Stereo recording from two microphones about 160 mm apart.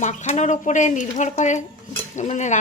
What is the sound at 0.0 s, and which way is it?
Speech, 45° left (ahead or behind).